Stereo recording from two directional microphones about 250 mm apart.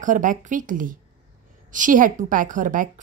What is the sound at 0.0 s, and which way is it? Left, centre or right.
A woman's voice, right.